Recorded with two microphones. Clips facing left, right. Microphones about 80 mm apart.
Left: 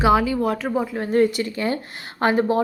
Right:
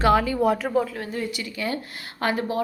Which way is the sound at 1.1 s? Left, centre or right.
Left.